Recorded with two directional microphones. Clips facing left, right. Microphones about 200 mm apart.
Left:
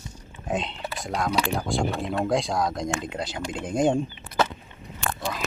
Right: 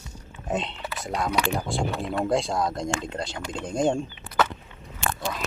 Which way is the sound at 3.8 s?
20° left (ahead or behind).